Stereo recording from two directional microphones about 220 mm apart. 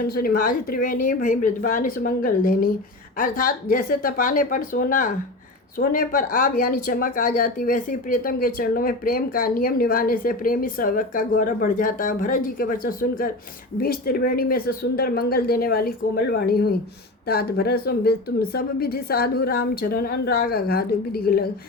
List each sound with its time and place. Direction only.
0.0 s a woman's voice: 40° left (ahead or behind)